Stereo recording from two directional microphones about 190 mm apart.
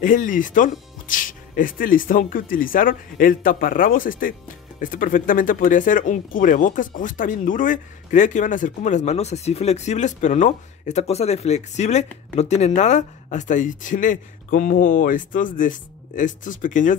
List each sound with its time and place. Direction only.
0.0 s speech: 45° left (ahead or behind)